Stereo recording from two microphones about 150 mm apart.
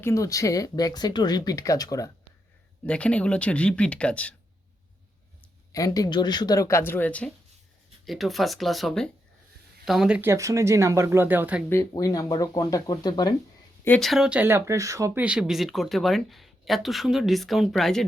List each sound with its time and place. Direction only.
0.0 s speech: 20° left (ahead or behind)
2.8 s speech: 5° left (ahead or behind)
5.7 s speech: 25° left (ahead or behind)
8.0 s speech: centre (ahead or behind)
10.2 s speech: 20° right (ahead or behind)
11.7 s speech: 20° left (ahead or behind)
14.0 s speech: centre (ahead or behind); by 15.2 s 20° right (ahead or behind)
15.2 s speech: 5° right (ahead or behind)